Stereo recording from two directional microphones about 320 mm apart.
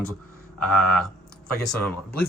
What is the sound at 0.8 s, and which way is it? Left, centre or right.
Speech, centre.